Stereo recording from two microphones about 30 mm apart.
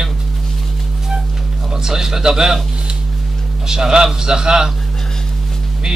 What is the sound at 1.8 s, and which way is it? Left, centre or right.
Speech, centre.